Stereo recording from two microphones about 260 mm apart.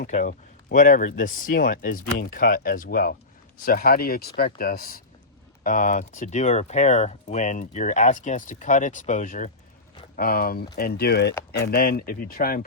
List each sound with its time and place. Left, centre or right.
0.1 s speech: left